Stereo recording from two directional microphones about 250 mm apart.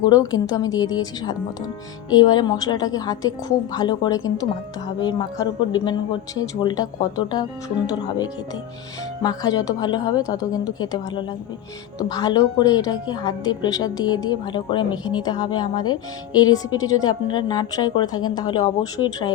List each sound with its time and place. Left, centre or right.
0.1 s a woman's voice: centre